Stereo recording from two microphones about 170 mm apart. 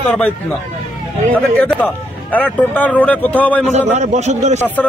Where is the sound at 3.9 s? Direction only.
45° right (ahead or behind).